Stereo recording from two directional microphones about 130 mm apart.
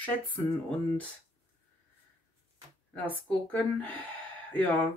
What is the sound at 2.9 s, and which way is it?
Speech, 10° left (ahead or behind).